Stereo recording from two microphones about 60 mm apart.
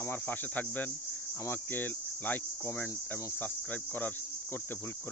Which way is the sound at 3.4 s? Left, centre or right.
Left.